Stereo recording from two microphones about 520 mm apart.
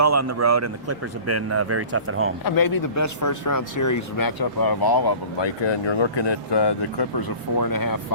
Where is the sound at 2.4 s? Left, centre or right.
Left.